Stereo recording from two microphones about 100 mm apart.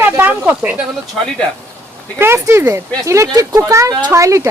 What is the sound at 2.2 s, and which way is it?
Speech, 25° right (ahead or behind).